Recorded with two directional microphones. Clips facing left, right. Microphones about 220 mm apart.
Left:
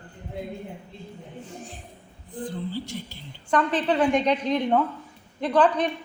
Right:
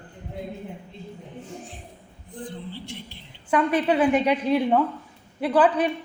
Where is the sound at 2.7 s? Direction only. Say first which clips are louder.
Left 5 dB; 45° left (ahead or behind).